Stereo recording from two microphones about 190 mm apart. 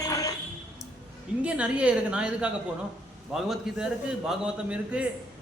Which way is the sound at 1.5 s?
5° right (ahead or behind).